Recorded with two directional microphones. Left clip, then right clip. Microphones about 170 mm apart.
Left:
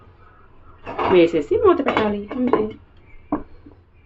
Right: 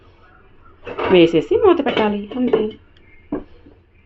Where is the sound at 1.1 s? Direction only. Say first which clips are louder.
Right 3 dB; 25° right (ahead or behind).